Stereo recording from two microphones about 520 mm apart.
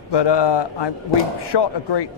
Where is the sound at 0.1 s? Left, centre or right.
Left.